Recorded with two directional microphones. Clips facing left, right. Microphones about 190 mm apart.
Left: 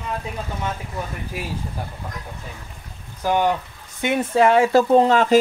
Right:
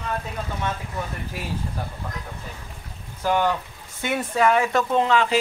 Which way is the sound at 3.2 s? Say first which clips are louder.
Left 2 dB; 15° left (ahead or behind).